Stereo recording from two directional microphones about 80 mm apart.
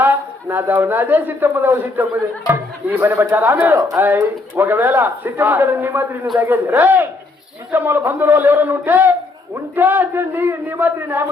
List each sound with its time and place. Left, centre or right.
0.0 s speech: right